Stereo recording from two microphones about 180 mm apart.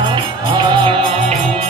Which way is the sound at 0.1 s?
25° right (ahead or behind).